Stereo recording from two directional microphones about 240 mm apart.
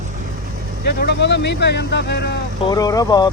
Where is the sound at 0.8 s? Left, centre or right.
Left.